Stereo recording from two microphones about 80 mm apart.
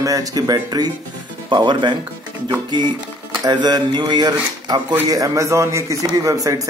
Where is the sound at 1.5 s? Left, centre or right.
Right.